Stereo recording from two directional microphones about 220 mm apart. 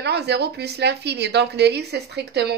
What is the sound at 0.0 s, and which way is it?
A woman's voice, 50° right (ahead or behind).